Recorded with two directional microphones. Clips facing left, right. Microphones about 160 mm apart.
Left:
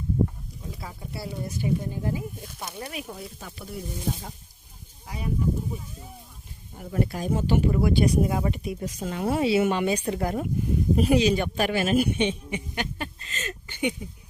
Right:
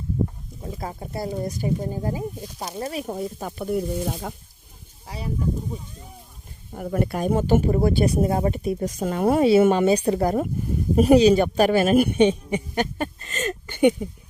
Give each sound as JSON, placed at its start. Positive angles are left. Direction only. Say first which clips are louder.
{"t": 0.6, "sound": "speech", "louder": "right 7 dB", "side_deg": -45}
{"t": 5.0, "sound": "speech", "louder": "right 1 dB", "side_deg": -30}
{"t": 6.7, "sound": "speech", "louder": "right 4 dB", "side_deg": -60}